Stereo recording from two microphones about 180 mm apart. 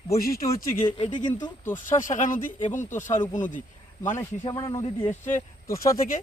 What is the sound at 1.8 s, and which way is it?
Speech, 45° left (ahead or behind).